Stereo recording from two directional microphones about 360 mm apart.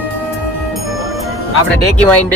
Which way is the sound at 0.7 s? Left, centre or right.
Centre.